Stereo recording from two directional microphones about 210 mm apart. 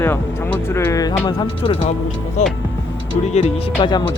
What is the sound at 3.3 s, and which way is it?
Speech, 25° left (ahead or behind).